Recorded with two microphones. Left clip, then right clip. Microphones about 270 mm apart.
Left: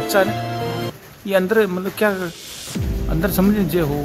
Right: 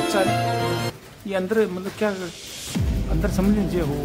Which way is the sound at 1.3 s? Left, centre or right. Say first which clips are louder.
Left 6 dB; centre.